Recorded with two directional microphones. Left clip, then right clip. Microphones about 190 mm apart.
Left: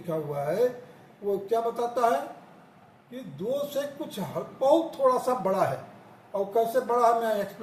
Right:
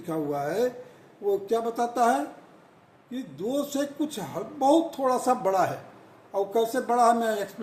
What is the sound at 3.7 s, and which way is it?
Speech, 65° right (ahead or behind).